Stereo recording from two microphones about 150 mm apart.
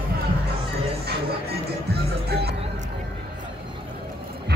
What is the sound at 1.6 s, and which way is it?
Music, 90° right.